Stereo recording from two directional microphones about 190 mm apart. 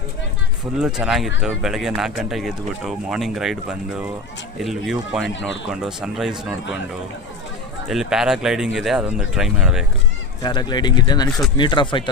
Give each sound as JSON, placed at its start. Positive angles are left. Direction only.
{"t": 0.8, "sound": "speech", "side_deg": -5}
{"t": 7.9, "sound": "speech", "side_deg": 0}
{"t": 10.4, "sound": "speech", "side_deg": 20}
{"t": 11.3, "sound": "speech", "side_deg": 0}
{"t": 11.5, "sound": "speech", "side_deg": 25}